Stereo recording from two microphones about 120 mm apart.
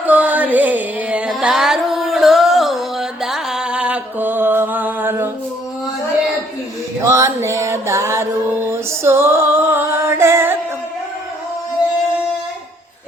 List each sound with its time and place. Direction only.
0.0 s music: 15° right (ahead or behind)
7.0 s mantra: 25° right (ahead or behind)